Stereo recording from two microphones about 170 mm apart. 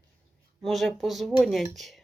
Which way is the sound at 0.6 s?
Centre (ahead or behind).